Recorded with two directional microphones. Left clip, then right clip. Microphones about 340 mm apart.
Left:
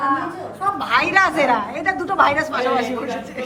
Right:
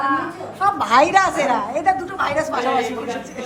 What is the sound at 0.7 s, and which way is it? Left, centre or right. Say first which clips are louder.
A woman's voice: right 2 dB; centre.